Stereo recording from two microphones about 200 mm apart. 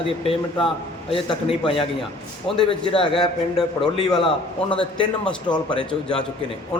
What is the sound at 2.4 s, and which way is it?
Speech, 25° left (ahead or behind).